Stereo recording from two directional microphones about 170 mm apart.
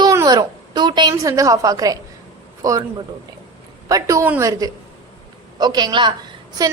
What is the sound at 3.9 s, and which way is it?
A woman's voice, 20° right (ahead or behind).